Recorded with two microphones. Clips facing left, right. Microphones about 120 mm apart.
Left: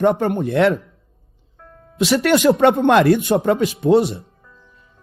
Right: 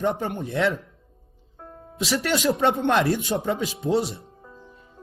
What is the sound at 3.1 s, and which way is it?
Speech, 60° left (ahead or behind).